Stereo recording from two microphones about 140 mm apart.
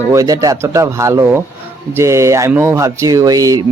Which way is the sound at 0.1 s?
25° right (ahead or behind).